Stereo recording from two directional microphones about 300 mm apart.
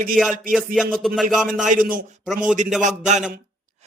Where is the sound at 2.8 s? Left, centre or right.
Right.